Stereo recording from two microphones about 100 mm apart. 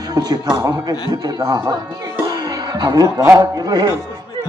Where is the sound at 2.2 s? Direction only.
40° right (ahead or behind).